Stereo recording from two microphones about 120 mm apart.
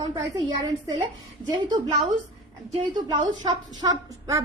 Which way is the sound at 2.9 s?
40° right (ahead or behind).